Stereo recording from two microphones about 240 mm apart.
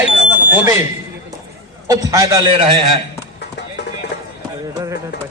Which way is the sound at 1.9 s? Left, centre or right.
Centre.